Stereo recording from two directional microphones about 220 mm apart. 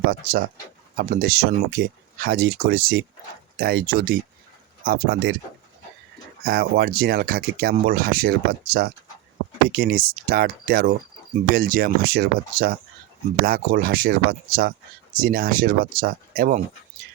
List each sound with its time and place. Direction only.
0.1 s speech: 40° right (ahead or behind)
6.4 s speech: 45° right (ahead or behind)